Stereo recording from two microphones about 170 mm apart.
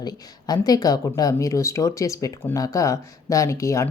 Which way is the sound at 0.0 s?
25° left (ahead or behind).